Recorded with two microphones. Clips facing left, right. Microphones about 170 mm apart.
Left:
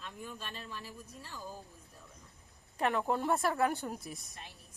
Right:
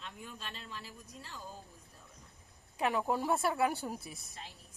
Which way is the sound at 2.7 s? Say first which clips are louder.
Left 1 dB; 5° right (ahead or behind).